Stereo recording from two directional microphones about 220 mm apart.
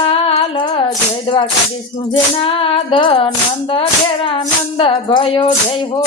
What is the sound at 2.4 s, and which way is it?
Speech, 25° left (ahead or behind).